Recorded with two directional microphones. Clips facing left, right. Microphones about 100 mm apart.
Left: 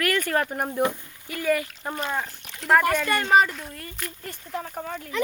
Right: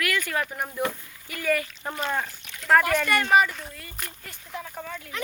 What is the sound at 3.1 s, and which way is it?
Speech, 25° left (ahead or behind).